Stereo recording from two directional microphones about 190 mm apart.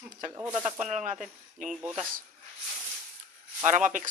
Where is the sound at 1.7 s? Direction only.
10° right (ahead or behind).